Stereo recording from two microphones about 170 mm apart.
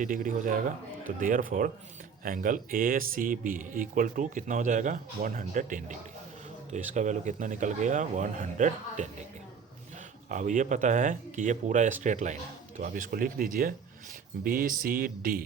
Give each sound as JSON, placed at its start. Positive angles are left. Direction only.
{"t": 0.0, "sound": "speech", "side_deg": -50}
{"t": 10.2, "sound": "speech", "side_deg": -50}